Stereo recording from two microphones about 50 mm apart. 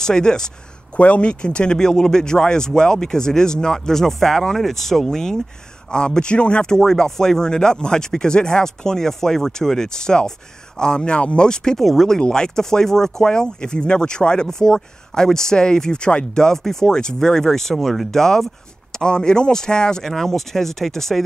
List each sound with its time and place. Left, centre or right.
0.0 s speech: centre
0.9 s speech: left; by 21.2 s centre